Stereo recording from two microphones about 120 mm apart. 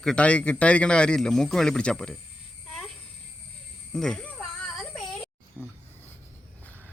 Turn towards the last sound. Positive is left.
turn(degrees=0)  # may be behind; listen again after turning